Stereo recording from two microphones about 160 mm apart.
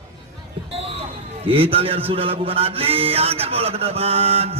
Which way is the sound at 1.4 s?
35° right (ahead or behind).